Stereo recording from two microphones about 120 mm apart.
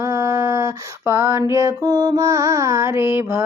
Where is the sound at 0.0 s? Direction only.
25° right (ahead or behind).